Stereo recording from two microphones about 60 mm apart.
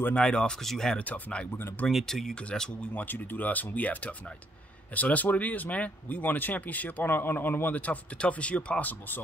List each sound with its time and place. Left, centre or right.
0.1 s speech: centre
0.9 s speech: left
2.0 s speech: centre
2.9 s speech: left